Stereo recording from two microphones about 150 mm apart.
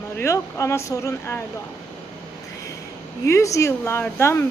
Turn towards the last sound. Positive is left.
turn(degrees=15)  # may be behind; listen again after turning